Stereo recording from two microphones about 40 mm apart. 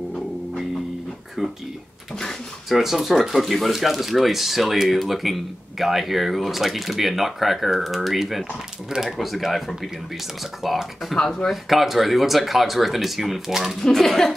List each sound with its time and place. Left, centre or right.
2.7 s speech: centre
11.1 s speech: centre
11.5 s speech: centre
13.7 s speech: centre